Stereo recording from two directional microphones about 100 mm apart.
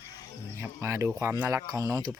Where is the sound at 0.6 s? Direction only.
30° right (ahead or behind).